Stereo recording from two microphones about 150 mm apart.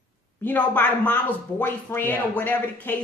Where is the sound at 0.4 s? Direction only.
10° left (ahead or behind).